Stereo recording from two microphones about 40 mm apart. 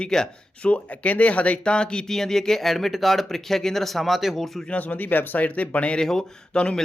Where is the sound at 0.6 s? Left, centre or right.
Left.